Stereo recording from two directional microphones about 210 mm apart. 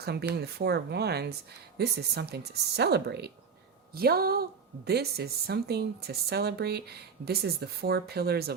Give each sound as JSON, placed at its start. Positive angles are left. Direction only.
{"t": 0.0, "sound": "speech", "side_deg": -50}